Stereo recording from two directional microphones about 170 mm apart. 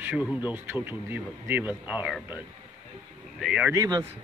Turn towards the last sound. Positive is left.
turn(degrees=-20)  # may be behind; listen again after turning